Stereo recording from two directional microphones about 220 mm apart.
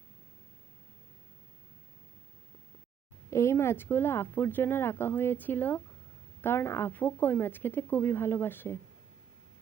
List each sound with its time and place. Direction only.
3.2 s speech: 15° left (ahead or behind)